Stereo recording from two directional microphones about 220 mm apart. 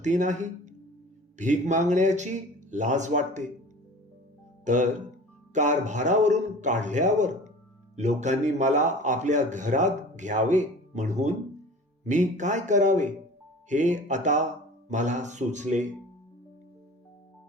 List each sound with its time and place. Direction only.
0.0 s a man's voice: 35° right (ahead or behind)
4.6 s a man's voice: 35° right (ahead or behind)